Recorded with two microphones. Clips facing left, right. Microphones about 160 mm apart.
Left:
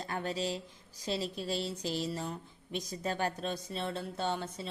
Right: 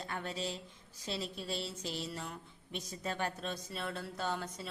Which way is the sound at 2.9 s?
35° left (ahead or behind).